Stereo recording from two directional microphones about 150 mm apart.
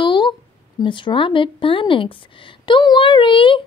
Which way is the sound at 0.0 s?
30° left (ahead or behind).